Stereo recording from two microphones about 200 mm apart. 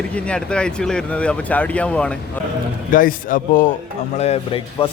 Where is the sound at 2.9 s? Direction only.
45° left (ahead or behind).